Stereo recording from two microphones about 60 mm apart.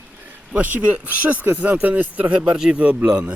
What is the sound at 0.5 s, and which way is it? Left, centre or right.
Speech, right.